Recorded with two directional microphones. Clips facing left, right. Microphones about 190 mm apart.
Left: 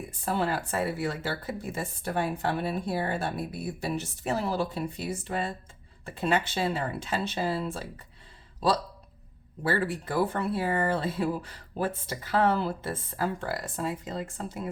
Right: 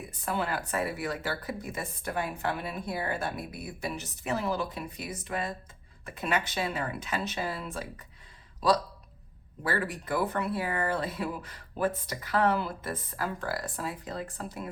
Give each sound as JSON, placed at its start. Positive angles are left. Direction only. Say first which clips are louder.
{"t": 0.3, "sound": "speech", "louder": "left 3 dB", "side_deg": 30}
{"t": 9.6, "sound": "speech", "louder": "left 3 dB", "side_deg": 30}